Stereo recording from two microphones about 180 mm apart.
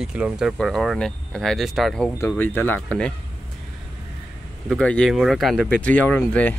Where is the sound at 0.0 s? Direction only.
5° right (ahead or behind).